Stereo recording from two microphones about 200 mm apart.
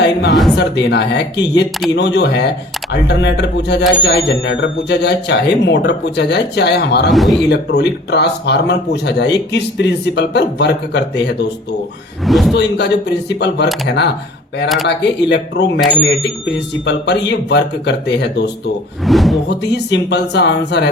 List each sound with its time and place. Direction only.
0.0 s speech: 65° left (ahead or behind)
7.1 s speech: centre (ahead or behind)
7.5 s speech: 55° left (ahead or behind)
12.2 s speech: centre (ahead or behind)
12.5 s speech: 60° left (ahead or behind)
19.0 s speech: centre (ahead or behind)
19.5 s speech: 60° left (ahead or behind)